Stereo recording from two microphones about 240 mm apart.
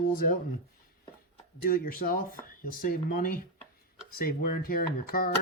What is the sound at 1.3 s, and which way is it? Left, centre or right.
Speech, left.